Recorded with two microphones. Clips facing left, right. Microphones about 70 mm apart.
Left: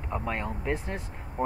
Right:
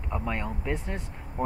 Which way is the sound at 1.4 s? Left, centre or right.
Left.